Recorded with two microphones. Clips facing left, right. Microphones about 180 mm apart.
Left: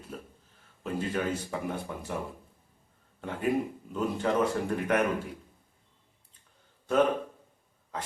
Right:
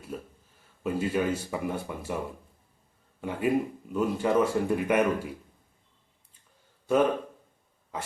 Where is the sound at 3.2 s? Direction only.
10° right (ahead or behind).